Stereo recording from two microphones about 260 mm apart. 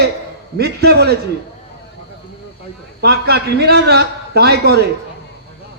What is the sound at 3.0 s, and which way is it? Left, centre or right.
A man's voice, right.